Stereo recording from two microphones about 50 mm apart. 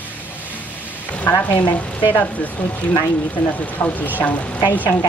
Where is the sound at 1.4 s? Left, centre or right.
Left.